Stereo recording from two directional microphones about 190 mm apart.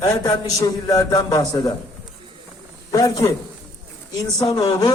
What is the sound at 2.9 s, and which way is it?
Speech, 20° left (ahead or behind).